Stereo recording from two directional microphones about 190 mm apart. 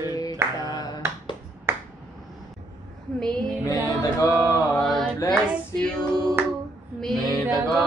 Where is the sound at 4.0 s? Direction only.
15° left (ahead or behind).